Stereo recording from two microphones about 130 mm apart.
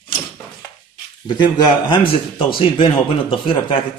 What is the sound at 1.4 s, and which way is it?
A man's voice, 40° left (ahead or behind).